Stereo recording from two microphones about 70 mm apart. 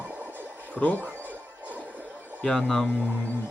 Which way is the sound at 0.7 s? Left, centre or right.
Left.